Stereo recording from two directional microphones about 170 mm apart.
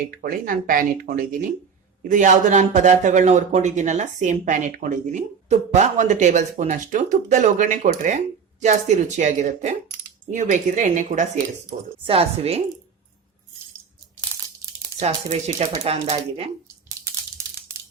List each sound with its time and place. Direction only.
0.2 s speech: 55° right (ahead or behind); by 12.6 s 35° right (ahead or behind)
14.9 s speech: 40° right (ahead or behind)